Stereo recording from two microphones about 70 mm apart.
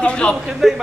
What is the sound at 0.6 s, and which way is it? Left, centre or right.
Speech, centre.